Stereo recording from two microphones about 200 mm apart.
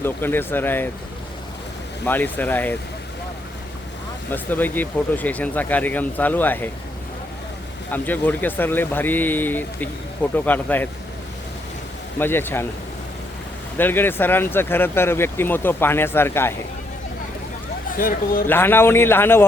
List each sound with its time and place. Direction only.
0.0 s speech: 10° left (ahead or behind)
2.0 s speech: 10° left (ahead or behind)
4.3 s speech: 10° left (ahead or behind)
7.9 s speech: 10° left (ahead or behind)
12.2 s speech: 10° left (ahead or behind)
13.7 s speech: 10° left (ahead or behind)
17.9 s speech: 45° left (ahead or behind)
18.4 s speech: 10° left (ahead or behind)